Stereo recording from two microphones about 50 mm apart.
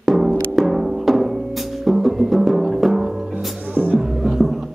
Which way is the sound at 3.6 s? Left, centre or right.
Right.